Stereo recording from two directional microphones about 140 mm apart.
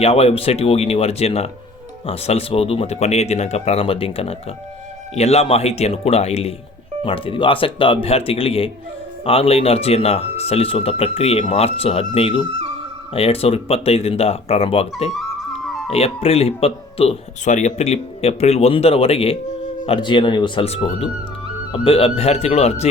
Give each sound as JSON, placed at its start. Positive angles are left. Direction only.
{"t": 0.0, "sound": "speech", "side_deg": 45}
{"t": 15.1, "sound": "music", "side_deg": 0}
{"t": 15.9, "sound": "speech", "side_deg": 45}
{"t": 17.4, "sound": "speech", "side_deg": 60}
{"t": 20.7, "sound": "speech", "side_deg": 45}